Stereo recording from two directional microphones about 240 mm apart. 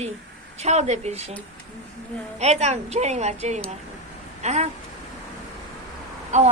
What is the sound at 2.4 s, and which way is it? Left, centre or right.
A woman's voice, right.